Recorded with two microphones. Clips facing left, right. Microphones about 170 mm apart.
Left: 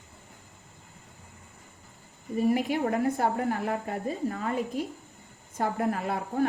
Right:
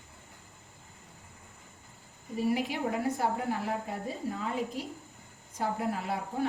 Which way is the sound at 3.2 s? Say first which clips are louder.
Left 4 dB; 55° left (ahead or behind).